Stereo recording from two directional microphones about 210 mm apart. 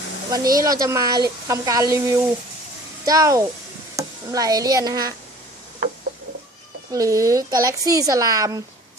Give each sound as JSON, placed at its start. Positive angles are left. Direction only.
{"t": 0.3, "sound": "speech", "side_deg": -15}
{"t": 6.9, "sound": "speech", "side_deg": -15}